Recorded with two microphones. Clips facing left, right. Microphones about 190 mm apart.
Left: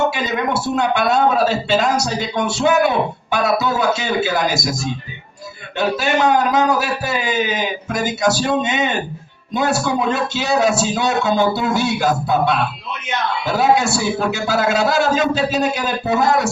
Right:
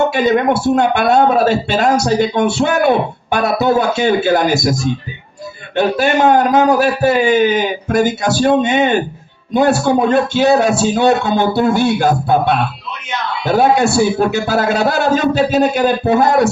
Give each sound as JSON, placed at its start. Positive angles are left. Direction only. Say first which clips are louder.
{"t": 0.1, "sound": "speech", "louder": "right 8 dB", "side_deg": -55}
{"t": 5.7, "sound": "a man's voice", "louder": "right 5 dB", "side_deg": -55}